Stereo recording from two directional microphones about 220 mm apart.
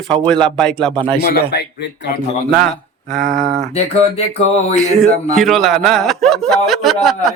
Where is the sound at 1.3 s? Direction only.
50° left (ahead or behind).